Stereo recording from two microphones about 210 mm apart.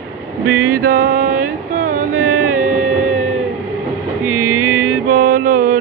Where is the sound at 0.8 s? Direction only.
45° right (ahead or behind).